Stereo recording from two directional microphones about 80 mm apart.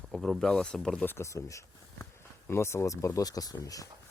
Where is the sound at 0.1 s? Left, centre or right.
Centre.